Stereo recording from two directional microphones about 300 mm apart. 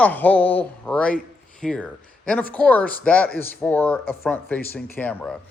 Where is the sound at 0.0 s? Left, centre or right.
Centre.